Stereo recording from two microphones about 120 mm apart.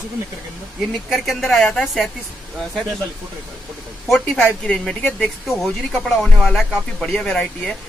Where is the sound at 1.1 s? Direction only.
Centre (ahead or behind).